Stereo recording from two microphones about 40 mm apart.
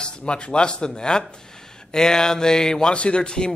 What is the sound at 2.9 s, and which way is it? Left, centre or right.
Speech, left.